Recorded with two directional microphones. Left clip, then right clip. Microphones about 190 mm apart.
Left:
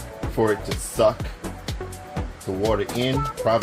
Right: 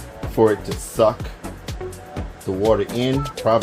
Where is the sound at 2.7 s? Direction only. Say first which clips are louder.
Right 5 dB; 35° right (ahead or behind).